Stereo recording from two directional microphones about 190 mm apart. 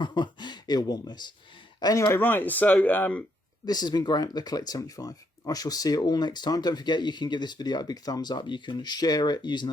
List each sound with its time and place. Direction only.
0.0 s speech: 25° left (ahead or behind)
3.7 s speech: 20° left (ahead or behind)